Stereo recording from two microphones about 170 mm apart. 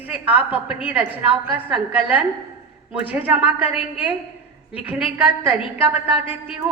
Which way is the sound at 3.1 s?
5° right (ahead or behind).